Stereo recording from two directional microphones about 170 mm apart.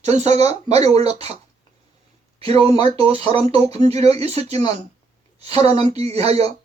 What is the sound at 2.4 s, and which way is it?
Speech, 35° right (ahead or behind).